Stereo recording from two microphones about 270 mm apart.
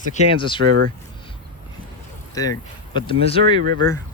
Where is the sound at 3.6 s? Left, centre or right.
Right.